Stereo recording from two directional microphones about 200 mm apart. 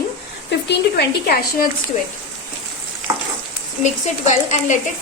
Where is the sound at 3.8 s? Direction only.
35° left (ahead or behind).